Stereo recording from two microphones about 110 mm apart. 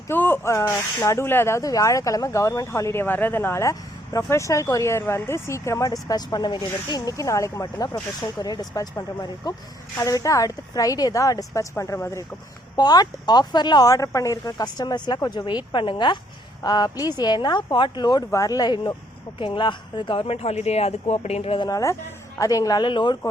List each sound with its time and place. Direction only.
0.1 s speech: 20° left (ahead or behind)
12.7 s speech: 35° left (ahead or behind); by 21.6 s 70° left (ahead or behind)
21.6 s speech: 30° left (ahead or behind); by 23.1 s 45° left (ahead or behind)